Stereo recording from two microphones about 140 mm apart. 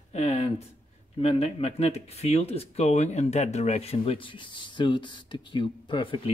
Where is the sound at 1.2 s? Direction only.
50° left (ahead or behind).